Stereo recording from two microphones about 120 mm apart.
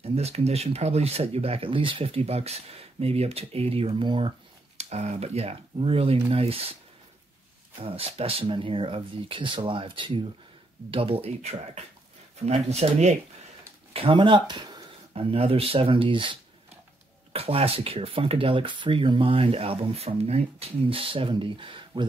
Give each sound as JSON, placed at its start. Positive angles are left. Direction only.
{"t": 0.0, "sound": "speech", "side_deg": -60}
{"t": 4.7, "sound": "speech", "side_deg": -65}
{"t": 7.8, "sound": "speech", "side_deg": -55}
{"t": 12.4, "sound": "speech", "side_deg": -65}
{"t": 13.9, "sound": "speech", "side_deg": -45}
{"t": 15.1, "sound": "speech", "side_deg": -55}